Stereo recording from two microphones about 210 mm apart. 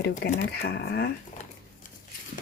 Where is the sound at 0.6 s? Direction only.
50° left (ahead or behind).